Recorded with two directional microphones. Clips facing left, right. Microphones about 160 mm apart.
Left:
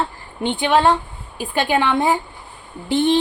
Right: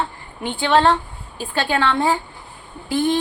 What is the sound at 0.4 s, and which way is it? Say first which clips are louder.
A woman's voice: left 1 dB; 20° left (ahead or behind).